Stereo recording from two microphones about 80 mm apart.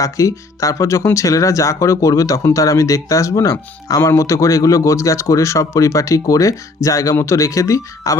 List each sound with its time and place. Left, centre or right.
0.0 s speech: left